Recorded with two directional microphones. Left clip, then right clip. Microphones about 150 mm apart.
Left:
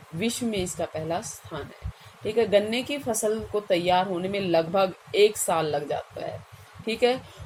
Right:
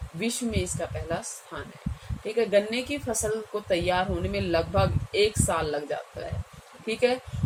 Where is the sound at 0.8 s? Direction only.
35° left (ahead or behind).